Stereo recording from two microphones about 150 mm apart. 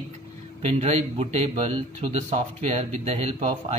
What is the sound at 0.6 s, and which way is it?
A man's voice, 45° right (ahead or behind).